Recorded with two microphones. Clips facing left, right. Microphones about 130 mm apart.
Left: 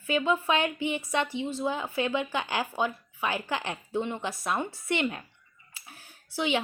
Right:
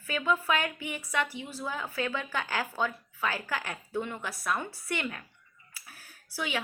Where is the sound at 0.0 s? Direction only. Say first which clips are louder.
Left 3 dB; 20° left (ahead or behind).